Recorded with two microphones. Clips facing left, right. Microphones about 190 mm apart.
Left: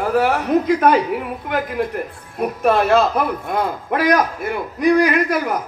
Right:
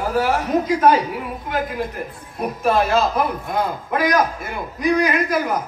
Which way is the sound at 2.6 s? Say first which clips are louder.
Left 3 dB; 60° left (ahead or behind).